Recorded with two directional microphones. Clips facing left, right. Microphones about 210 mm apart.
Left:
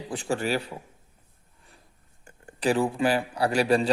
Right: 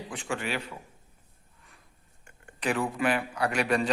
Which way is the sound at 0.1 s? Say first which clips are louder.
Left 6 dB; 35° left (ahead or behind).